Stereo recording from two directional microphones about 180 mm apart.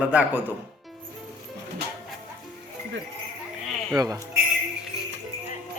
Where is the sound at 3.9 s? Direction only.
20° right (ahead or behind).